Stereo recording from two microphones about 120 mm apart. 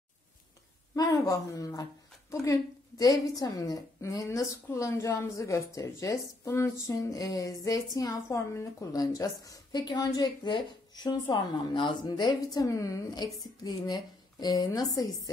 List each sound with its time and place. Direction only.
0.9 s a woman's voice: 30° left (ahead or behind)